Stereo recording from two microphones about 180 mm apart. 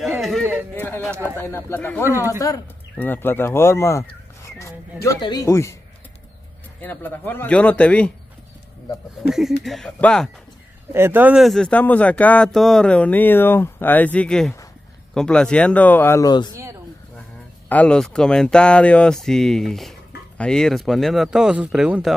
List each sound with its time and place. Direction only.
0.2 s a sound: centre (ahead or behind)
1.3 s speech: 10° left (ahead or behind)
6.8 s speech: 10° left (ahead or behind)
9.6 s speech: centre (ahead or behind)
10.9 s speech: 15° right (ahead or behind); by 16.5 s 25° left (ahead or behind)
17.6 s speech: 5° left (ahead or behind)